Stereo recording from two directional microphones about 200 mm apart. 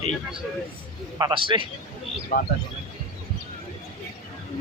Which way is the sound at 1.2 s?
25° right (ahead or behind).